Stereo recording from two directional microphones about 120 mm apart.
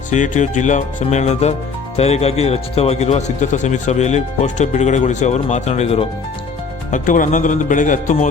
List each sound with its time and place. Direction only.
0.1 s speech: 90° left; by 6.1 s 60° left (ahead or behind)
6.9 s speech: 90° left